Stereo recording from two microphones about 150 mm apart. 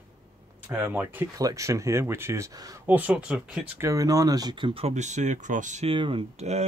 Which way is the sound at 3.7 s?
20° right (ahead or behind).